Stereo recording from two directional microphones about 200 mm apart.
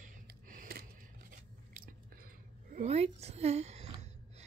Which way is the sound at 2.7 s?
30° right (ahead or behind).